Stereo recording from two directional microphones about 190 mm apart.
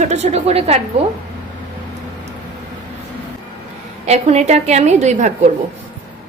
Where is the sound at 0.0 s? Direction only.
35° right (ahead or behind).